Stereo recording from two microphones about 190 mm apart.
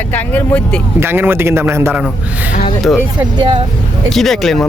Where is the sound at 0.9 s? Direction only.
10° right (ahead or behind).